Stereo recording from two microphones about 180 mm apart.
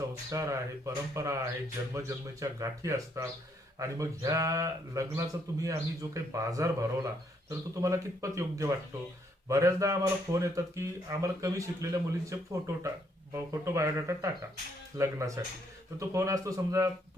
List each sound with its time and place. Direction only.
0.3 s speech: 15° right (ahead or behind)